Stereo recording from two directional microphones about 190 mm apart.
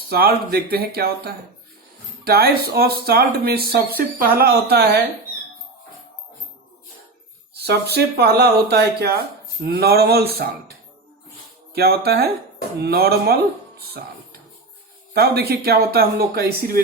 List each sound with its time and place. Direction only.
0.1 s speech: 55° right (ahead or behind)
7.5 s speech: 60° right (ahead or behind)
11.7 s speech: 55° right (ahead or behind)
15.1 s speech: 55° right (ahead or behind)